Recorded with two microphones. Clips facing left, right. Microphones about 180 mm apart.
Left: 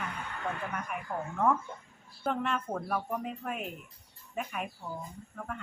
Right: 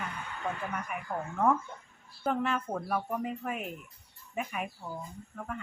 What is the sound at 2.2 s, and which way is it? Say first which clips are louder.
A woman's voice: right 1 dB; centre (ahead or behind).